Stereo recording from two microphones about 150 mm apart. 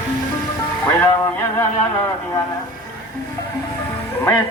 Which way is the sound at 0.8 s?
15° left (ahead or behind).